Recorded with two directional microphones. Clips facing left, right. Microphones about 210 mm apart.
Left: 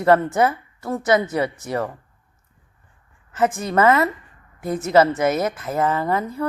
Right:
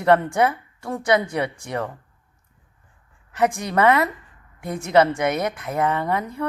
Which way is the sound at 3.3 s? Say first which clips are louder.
Left 1 dB; centre (ahead or behind).